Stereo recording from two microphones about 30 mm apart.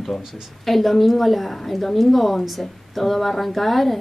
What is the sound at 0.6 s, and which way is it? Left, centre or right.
A woman's voice, centre.